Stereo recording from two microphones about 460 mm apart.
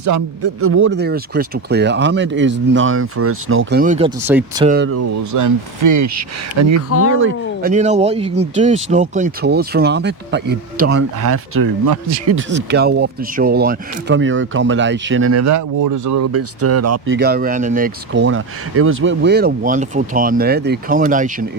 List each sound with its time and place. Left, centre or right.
0.0 s speech: right; by 4.9 s centre
4.9 s speech: right
17.2 s speech: centre